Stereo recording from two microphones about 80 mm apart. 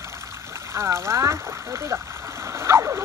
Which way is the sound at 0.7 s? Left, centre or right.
Right.